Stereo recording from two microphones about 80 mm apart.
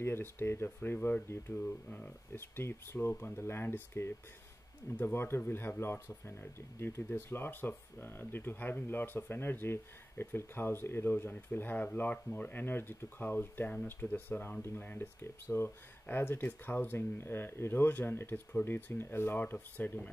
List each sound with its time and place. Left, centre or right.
0.0 s speech: left
2.3 s speech: left